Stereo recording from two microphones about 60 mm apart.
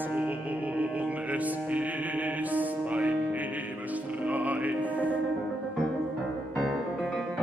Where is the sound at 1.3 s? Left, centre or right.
Right.